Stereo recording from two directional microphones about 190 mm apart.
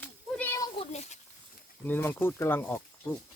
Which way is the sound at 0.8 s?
35° left (ahead or behind).